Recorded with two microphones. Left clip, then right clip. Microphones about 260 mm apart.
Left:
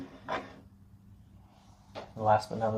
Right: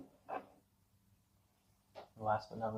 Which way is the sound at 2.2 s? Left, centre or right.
Right.